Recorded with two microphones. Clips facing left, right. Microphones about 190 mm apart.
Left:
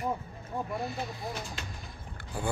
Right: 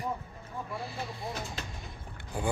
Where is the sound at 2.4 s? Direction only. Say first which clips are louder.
Right 1 dB; 15° right (ahead or behind).